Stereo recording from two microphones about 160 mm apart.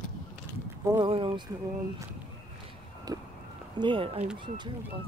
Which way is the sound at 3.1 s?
25° right (ahead or behind).